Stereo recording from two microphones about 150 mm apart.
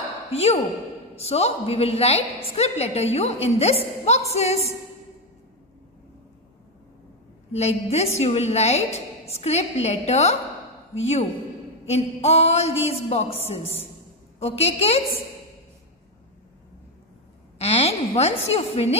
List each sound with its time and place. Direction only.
0.3 s a woman's voice: 45° left (ahead or behind)
7.5 s a woman's voice: 45° left (ahead or behind)
17.6 s a woman's voice: 45° left (ahead or behind)